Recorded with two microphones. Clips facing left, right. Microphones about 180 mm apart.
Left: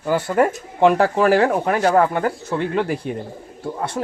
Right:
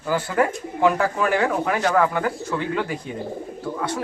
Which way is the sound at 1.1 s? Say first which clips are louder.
Left 6 dB; 70° left (ahead or behind).